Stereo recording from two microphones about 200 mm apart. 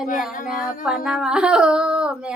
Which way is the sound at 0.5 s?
45° left (ahead or behind).